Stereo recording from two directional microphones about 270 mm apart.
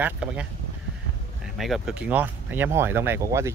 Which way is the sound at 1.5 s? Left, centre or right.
Centre.